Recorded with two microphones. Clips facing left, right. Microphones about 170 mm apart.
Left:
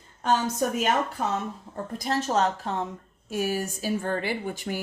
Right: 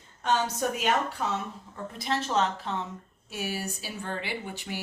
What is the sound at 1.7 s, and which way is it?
Speech, 45° left (ahead or behind).